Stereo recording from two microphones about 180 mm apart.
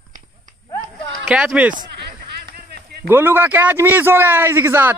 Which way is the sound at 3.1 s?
10° right (ahead or behind).